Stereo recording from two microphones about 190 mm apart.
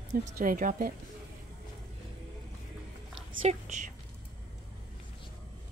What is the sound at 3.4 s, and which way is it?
Speech, 35° right (ahead or behind).